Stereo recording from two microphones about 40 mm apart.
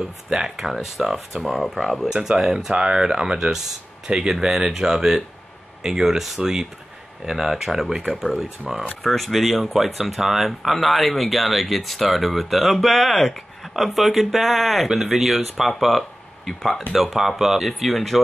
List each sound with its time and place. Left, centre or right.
0.0 s speech: centre
0.6 s speech: centre
1.8 s speech: centre
2.1 s speech: centre
16.9 s speech: centre